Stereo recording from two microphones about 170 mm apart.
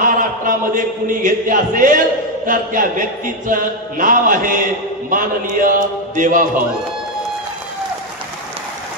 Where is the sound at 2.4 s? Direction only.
55° right (ahead or behind).